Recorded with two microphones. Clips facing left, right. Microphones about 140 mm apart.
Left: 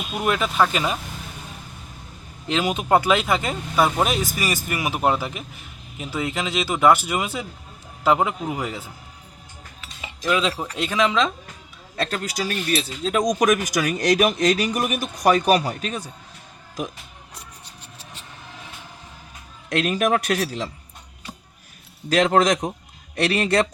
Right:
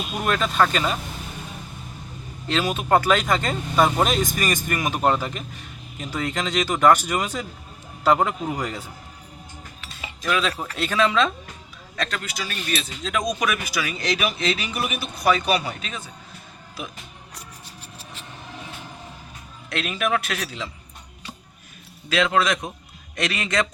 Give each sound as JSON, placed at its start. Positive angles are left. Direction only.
{"t": 0.2, "sound": "speech", "side_deg": 10}
{"t": 2.5, "sound": "speech", "side_deg": 15}
{"t": 10.2, "sound": "speech", "side_deg": 20}
{"t": 11.9, "sound": "speech", "side_deg": 35}
{"t": 19.7, "sound": "speech", "side_deg": 40}
{"t": 22.1, "sound": "speech", "side_deg": 40}